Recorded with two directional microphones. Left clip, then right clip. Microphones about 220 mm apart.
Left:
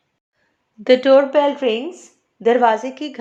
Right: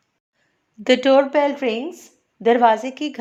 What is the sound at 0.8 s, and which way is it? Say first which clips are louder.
Speech: left 3 dB; 30° right (ahead or behind).